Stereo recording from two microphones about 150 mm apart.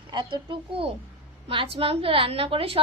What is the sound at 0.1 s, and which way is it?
A woman's voice, 30° right (ahead or behind).